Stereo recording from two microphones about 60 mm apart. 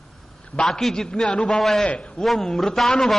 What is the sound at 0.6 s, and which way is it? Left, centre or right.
Speech, centre.